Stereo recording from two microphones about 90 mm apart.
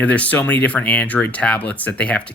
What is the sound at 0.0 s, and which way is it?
Speech, 15° left (ahead or behind).